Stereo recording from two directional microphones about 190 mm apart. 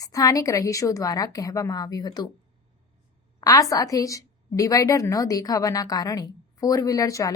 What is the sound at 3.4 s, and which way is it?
A woman's voice, 20° left (ahead or behind).